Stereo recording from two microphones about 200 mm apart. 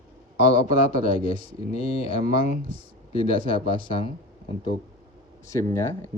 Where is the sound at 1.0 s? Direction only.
45° right (ahead or behind).